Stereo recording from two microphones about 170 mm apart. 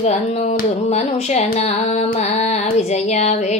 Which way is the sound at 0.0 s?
40° left (ahead or behind).